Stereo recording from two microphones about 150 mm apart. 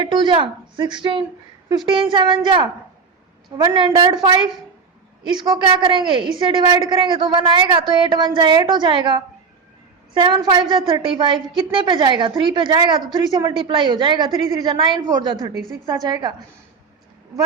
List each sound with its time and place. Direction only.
0.0 s a woman's voice: 30° right (ahead or behind)